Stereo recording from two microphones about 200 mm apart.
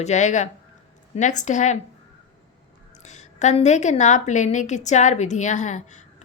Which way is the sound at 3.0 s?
35° left (ahead or behind).